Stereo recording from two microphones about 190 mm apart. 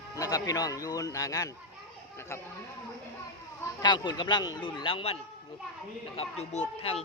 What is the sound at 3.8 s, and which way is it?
Speech, 25° left (ahead or behind).